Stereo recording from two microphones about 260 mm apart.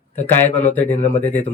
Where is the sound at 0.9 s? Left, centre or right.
Left.